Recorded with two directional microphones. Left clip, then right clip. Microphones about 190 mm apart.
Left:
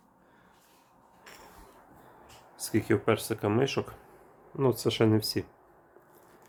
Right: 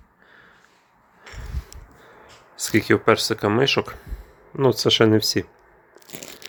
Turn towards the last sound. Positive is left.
turn(degrees=-20)  # may be behind; listen again after turning